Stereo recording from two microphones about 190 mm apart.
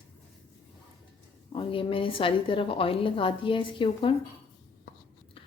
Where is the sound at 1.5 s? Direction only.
30° left (ahead or behind).